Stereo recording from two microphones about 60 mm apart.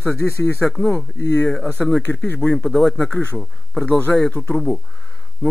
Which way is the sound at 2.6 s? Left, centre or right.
Centre.